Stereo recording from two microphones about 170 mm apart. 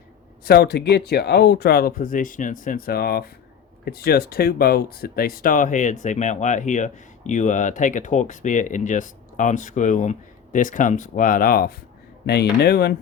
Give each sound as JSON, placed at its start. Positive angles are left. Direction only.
{"t": 0.4, "sound": "speech", "side_deg": 70}
{"t": 12.2, "sound": "speech", "side_deg": 75}